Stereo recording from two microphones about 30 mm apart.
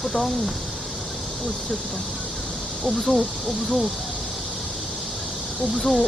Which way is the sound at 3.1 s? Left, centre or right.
Right.